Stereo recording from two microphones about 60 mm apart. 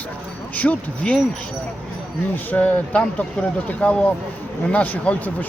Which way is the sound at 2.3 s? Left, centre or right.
Left.